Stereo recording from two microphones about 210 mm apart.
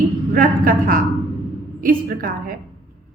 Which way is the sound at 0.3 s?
40° right (ahead or behind).